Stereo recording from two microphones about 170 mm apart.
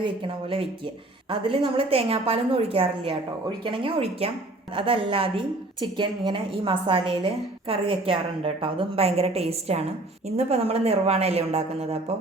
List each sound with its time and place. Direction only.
0.0 s a woman's voice: 30° right (ahead or behind)